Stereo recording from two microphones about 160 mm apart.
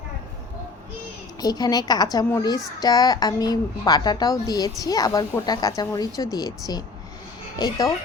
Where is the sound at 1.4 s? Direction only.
25° left (ahead or behind).